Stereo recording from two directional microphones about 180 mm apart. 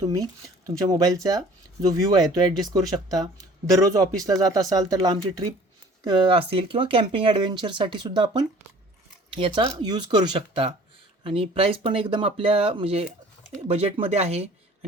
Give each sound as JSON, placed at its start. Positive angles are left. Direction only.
{"t": 0.0, "sound": "speech", "side_deg": -20}